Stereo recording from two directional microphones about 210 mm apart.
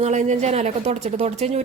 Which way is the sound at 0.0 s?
35° right (ahead or behind).